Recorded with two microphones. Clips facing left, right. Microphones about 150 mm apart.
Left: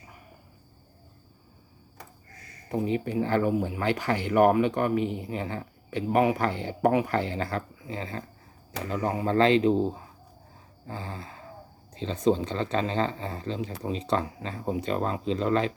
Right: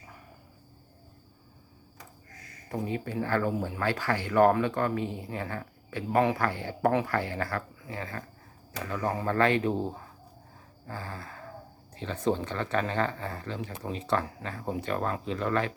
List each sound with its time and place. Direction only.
2.6 s speech: 20° left (ahead or behind)
10.8 s a sound: 25° left (ahead or behind)
11.9 s speech: 20° left (ahead or behind)